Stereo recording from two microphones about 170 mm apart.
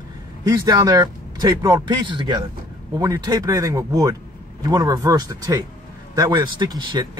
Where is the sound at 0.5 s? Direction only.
20° right (ahead or behind).